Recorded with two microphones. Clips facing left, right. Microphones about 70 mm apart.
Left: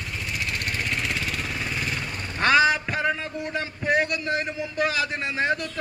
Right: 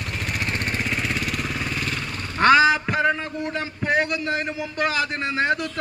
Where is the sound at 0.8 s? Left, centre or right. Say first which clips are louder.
Right 2 dB; centre.